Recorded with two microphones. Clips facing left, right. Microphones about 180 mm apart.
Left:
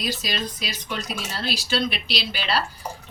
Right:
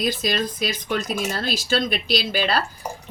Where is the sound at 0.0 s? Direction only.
50° right (ahead or behind).